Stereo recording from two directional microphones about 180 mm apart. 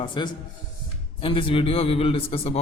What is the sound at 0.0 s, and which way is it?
Speech, 30° left (ahead or behind).